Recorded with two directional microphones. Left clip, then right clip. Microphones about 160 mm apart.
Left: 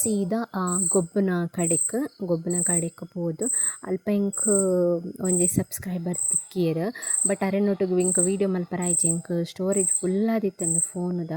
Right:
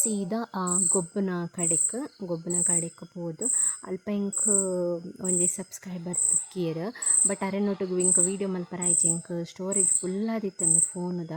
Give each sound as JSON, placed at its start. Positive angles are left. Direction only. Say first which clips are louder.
{"t": 0.0, "sound": "speech", "louder": "left 4 dB", "side_deg": 15}